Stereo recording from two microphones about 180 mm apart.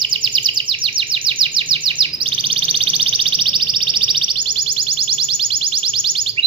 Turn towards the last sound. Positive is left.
turn(degrees=-30)  # may be behind; listen again after turning